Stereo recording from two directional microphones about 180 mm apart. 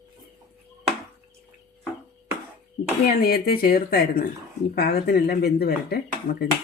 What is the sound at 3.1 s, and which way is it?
Speech, 60° left (ahead or behind).